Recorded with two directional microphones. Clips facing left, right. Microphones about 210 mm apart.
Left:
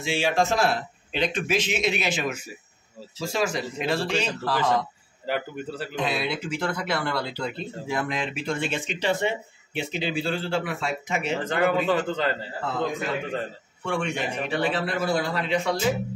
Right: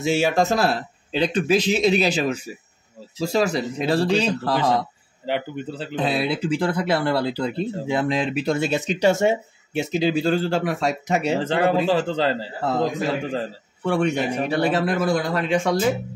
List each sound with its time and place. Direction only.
0.0 s speech: 40° right (ahead or behind)
5.2 s speech: 25° right (ahead or behind); by 15.8 s 45° right (ahead or behind)